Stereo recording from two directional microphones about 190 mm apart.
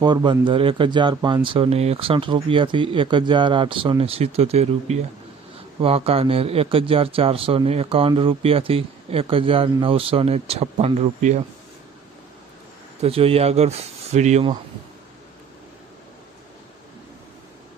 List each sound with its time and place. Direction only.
0.0 s speech: 25° right (ahead or behind); by 11.4 s 40° right (ahead or behind)
13.0 s speech: 30° right (ahead or behind)